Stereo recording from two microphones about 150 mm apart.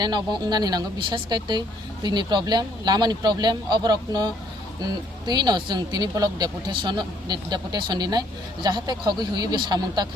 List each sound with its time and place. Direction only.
0.0 s speech: 30° right (ahead or behind)